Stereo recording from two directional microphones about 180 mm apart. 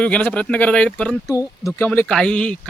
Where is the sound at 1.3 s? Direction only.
15° left (ahead or behind).